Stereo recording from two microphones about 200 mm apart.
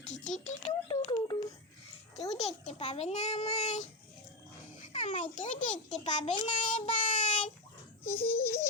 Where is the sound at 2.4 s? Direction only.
35° left (ahead or behind).